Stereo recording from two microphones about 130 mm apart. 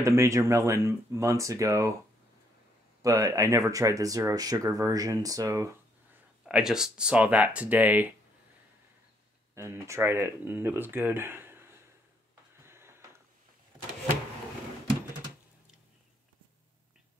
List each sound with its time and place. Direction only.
0.0 s speech: 20° right (ahead or behind)
3.0 s speech: 25° right (ahead or behind)
6.4 s speech: 5° right (ahead or behind)
9.6 s speech: 20° right (ahead or behind)
12.6 s a sound: 20° right (ahead or behind)